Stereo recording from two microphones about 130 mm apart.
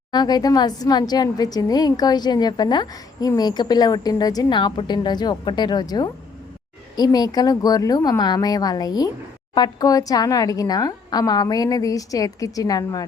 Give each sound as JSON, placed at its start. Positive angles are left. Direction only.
{"t": 0.1, "sound": "a woman's voice", "side_deg": 30}